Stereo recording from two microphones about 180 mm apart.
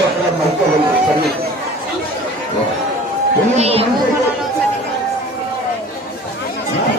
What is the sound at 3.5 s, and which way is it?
Chatter, 35° right (ahead or behind).